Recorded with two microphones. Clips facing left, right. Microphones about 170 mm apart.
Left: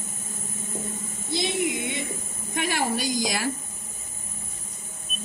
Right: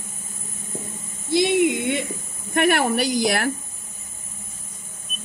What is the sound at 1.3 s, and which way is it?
A woman's voice, 60° right (ahead or behind).